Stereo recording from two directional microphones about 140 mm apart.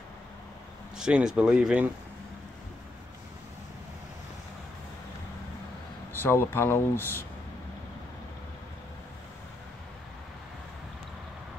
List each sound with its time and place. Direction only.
0.9 s speech: 5° right (ahead or behind)
6.1 s speech: 15° left (ahead or behind)